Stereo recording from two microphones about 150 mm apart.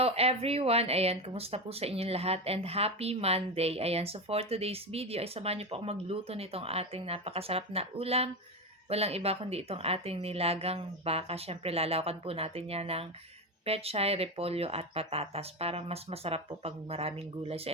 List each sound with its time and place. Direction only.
0.0 s speech: 45° right (ahead or behind)